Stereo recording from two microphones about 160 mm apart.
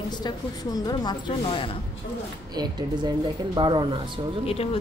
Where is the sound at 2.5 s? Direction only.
25° right (ahead or behind).